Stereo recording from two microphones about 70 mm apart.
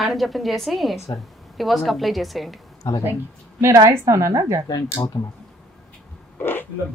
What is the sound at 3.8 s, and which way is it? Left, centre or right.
Speech, right.